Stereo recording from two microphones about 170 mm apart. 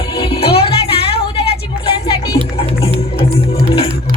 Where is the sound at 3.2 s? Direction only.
35° left (ahead or behind).